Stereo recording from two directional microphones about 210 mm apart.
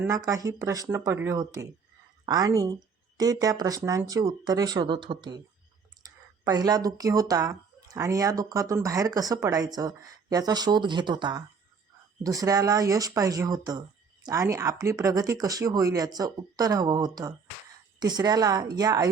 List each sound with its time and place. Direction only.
0.0 s speech: 15° right (ahead or behind)
6.4 s a woman's voice: 15° right (ahead or behind)